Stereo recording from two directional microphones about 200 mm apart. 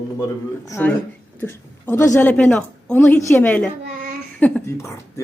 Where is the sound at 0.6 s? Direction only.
10° left (ahead or behind).